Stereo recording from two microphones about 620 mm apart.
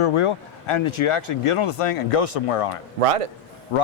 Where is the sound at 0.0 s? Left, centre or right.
Left.